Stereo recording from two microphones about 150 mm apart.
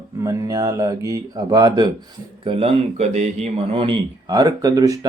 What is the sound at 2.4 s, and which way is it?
Speech, 40° right (ahead or behind).